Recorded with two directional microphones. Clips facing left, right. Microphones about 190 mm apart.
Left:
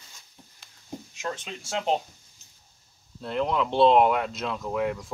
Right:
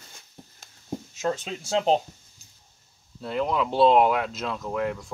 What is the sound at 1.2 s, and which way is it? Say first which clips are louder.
Speech: right 6 dB; 30° right (ahead or behind).